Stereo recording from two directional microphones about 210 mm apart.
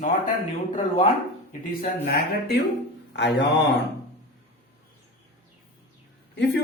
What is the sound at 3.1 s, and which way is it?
Mantra, 55° left (ahead or behind).